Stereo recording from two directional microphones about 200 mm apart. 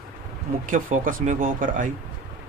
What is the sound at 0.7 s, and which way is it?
Speech, 40° right (ahead or behind).